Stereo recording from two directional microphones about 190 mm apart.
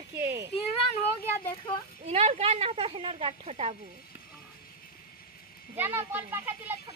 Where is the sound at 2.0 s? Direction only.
35° right (ahead or behind).